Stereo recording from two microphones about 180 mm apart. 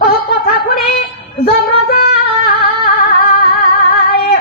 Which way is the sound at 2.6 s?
60° left (ahead or behind).